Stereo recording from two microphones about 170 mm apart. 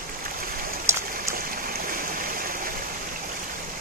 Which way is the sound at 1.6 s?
60° right (ahead or behind).